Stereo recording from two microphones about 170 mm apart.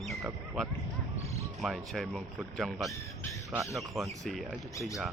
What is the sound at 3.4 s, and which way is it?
Speech, 20° right (ahead or behind).